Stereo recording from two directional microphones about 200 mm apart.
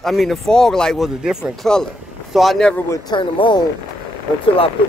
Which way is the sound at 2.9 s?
25° left (ahead or behind).